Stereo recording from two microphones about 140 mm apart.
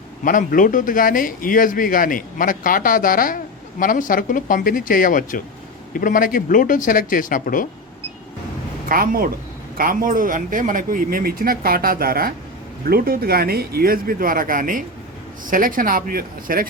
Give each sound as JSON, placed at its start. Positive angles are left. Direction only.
{"t": 0.3, "sound": "a man's voice", "side_deg": 70}
{"t": 8.9, "sound": "speech", "side_deg": -90}